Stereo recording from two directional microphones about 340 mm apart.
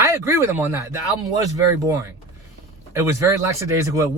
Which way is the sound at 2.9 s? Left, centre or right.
Centre.